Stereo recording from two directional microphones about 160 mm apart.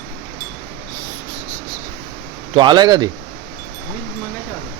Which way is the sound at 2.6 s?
25° right (ahead or behind).